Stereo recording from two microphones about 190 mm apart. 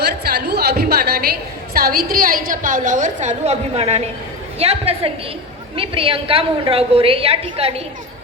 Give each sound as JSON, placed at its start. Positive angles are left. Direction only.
{"t": 0.0, "sound": "a woman's voice", "side_deg": -60}